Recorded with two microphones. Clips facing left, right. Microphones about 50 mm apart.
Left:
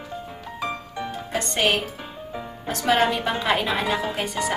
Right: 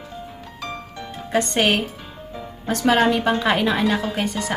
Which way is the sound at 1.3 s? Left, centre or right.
Centre.